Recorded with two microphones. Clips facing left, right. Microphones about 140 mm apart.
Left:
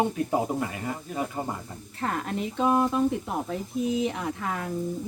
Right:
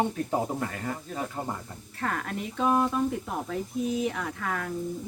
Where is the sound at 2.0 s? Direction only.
20° left (ahead or behind).